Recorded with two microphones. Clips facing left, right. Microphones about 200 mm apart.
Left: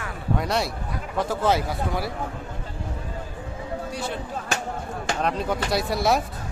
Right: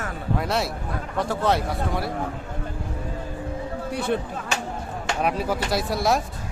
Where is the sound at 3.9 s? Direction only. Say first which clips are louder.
Right 9 dB; 60° right (ahead or behind).